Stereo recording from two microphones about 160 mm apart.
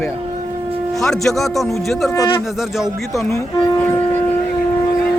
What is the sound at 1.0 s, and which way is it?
Speech, centre (ahead or behind).